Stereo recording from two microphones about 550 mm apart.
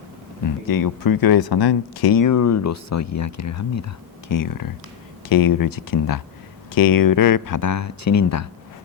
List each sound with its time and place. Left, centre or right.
0.4 s speech: left